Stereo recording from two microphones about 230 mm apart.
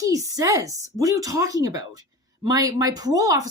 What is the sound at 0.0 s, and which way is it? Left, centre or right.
A woman's voice, centre.